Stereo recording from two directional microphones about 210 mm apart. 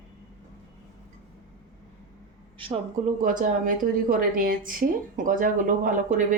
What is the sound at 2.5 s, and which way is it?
Speech, 25° right (ahead or behind).